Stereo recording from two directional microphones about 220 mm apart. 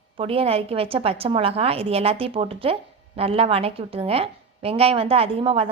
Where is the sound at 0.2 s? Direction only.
25° right (ahead or behind).